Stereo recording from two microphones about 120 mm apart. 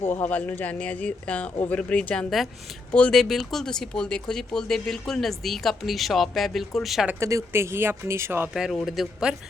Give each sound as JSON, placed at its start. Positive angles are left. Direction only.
{"t": 0.0, "sound": "speech", "side_deg": 15}
{"t": 7.1, "sound": "speech", "side_deg": -25}
{"t": 8.5, "sound": "speech", "side_deg": 0}